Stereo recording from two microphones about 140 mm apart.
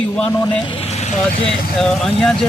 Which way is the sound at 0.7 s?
45° left (ahead or behind).